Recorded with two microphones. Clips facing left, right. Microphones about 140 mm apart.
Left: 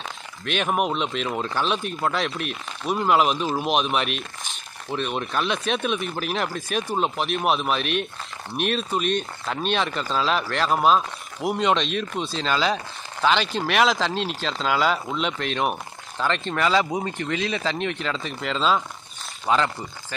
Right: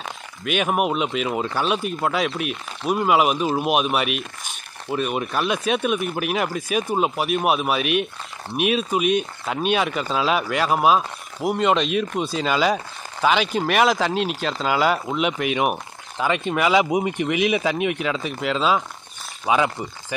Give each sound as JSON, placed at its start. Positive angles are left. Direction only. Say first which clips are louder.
{"t": 0.5, "sound": "speech", "louder": "right 2 dB", "side_deg": -5}